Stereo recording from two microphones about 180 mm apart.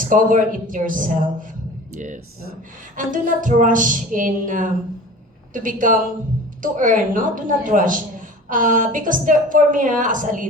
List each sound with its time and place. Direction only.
0.0 s a woman's voice: 50° right (ahead or behind)